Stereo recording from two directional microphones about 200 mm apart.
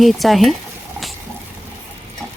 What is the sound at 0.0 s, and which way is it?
Speech, centre (ahead or behind).